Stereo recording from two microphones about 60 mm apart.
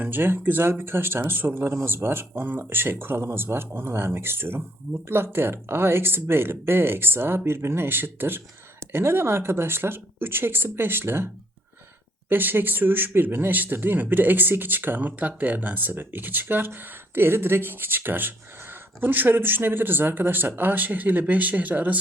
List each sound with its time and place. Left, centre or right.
0.0 s speech: right
12.3 s speech: right